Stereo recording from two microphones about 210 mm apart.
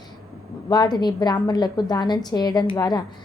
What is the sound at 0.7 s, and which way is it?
A woman's voice, 20° left (ahead or behind).